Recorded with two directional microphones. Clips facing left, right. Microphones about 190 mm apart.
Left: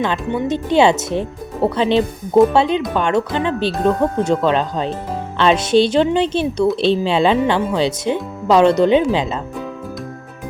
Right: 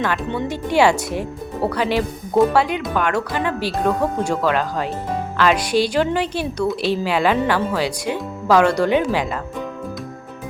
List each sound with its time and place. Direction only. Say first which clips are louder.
0.0 s speech: left 3 dB; 20° left (ahead or behind)